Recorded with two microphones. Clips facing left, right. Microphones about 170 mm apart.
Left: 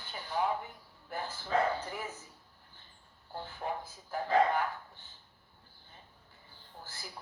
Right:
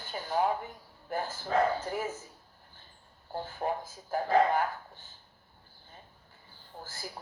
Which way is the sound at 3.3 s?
45° right (ahead or behind).